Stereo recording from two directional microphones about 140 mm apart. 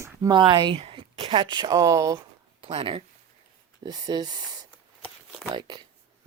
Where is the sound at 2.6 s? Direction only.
40° right (ahead or behind).